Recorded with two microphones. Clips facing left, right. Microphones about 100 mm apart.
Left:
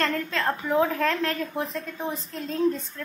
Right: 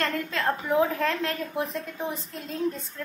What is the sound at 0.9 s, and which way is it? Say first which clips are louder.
A woman's voice: left 2 dB; 15° right (ahead or behind).